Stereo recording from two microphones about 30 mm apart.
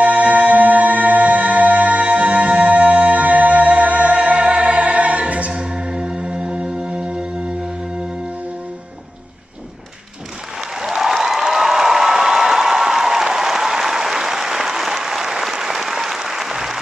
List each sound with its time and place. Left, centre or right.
0.0 s music: right
5.5 s music: right
10.9 s applause: centre